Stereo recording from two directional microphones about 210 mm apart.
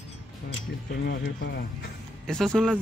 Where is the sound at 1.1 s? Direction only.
55° left (ahead or behind).